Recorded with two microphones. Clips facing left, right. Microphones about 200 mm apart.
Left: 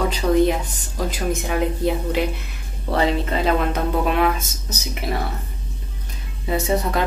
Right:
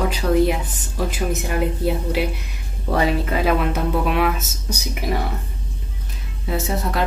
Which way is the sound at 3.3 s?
10° right (ahead or behind).